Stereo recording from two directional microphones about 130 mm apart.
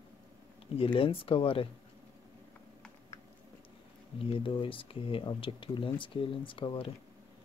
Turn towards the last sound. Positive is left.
turn(degrees=40)  # may be behind; listen again after turning